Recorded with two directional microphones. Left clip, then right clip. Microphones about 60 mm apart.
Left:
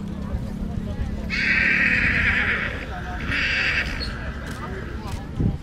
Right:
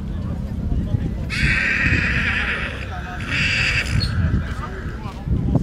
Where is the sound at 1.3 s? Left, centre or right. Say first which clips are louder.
Even; right.